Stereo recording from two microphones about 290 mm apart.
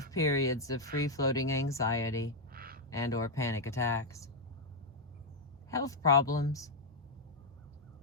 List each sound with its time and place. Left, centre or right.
0.0 s speech: centre
2.5 s a sound: right
2.9 s speech: centre
5.7 s speech: centre